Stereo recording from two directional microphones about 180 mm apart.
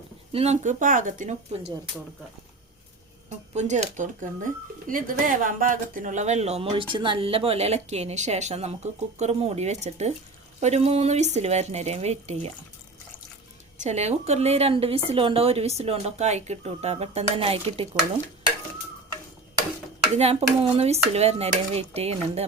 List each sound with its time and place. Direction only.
0.3 s speech: 40° right (ahead or behind)
3.2 s speech: 40° right (ahead or behind)
13.8 s speech: 40° right (ahead or behind)
20.1 s speech: 35° right (ahead or behind)